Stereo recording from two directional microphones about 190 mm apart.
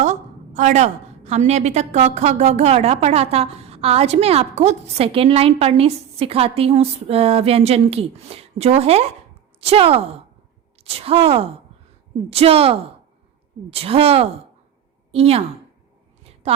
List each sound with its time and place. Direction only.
0.0 s a woman's voice: 40° right (ahead or behind)